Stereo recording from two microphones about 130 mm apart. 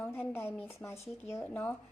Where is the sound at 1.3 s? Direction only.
20° left (ahead or behind).